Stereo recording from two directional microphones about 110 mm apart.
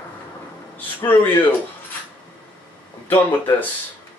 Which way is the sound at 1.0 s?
20° left (ahead or behind).